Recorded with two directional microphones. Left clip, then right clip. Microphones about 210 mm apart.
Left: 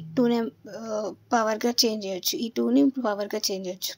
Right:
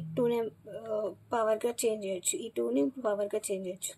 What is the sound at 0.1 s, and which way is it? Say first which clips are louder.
Speech: left 5 dB; 30° left (ahead or behind).